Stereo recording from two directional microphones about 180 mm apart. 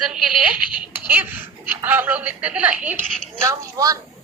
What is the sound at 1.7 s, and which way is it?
A woman's voice, 10° right (ahead or behind).